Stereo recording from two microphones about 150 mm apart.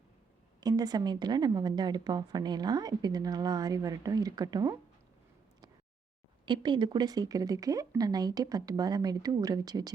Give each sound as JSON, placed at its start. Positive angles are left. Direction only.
{"t": 0.6, "sound": "a woman's voice", "side_deg": -25}
{"t": 6.4, "sound": "a woman's voice", "side_deg": -30}